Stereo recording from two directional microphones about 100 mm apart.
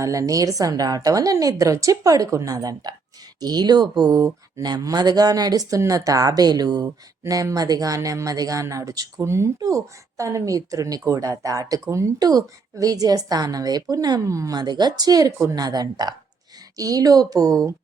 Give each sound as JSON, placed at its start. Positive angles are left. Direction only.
{"t": 0.0, "sound": "speech", "side_deg": -35}